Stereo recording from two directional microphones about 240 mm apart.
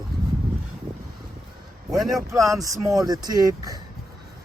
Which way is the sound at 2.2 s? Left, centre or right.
Centre.